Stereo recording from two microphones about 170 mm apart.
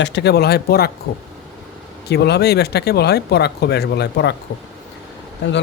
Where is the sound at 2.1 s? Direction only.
75° left (ahead or behind).